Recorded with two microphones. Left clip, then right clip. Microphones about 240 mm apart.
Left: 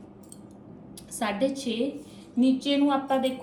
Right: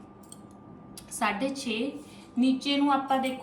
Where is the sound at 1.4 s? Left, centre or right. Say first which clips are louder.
Left 4 dB; centre.